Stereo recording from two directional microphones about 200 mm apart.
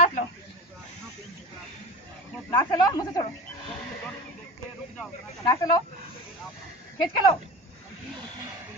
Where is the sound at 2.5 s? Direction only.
20° left (ahead or behind).